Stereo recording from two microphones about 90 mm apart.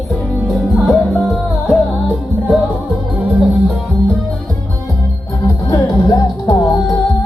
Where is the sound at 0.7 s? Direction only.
Centre (ahead or behind).